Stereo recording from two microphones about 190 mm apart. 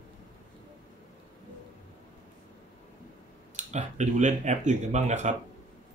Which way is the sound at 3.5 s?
40° right (ahead or behind).